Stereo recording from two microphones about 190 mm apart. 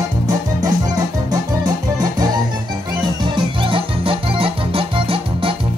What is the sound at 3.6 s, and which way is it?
Keyboard, 30° right (ahead or behind).